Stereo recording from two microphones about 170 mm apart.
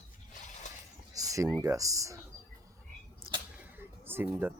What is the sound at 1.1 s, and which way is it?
Speech, 20° right (ahead or behind).